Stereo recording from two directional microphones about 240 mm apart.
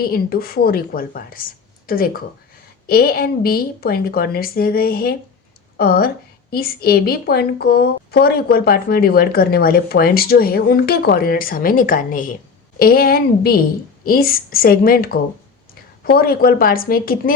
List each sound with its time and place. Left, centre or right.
0.0 s a woman's voice: left